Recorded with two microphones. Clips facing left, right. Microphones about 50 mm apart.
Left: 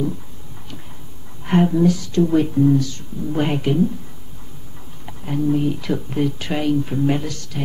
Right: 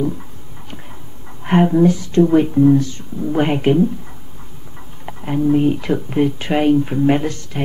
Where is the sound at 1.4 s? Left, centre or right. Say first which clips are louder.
Right 3 dB; right.